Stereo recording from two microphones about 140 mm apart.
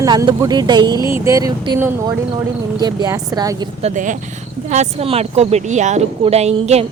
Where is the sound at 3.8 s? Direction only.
65° right (ahead or behind).